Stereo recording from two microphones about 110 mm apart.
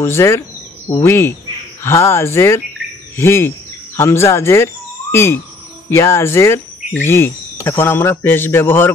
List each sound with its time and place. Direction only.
0.0 s a man's voice: 25° left (ahead or behind)